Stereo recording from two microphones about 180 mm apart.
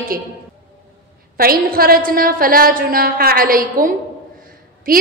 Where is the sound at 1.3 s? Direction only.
55° right (ahead or behind).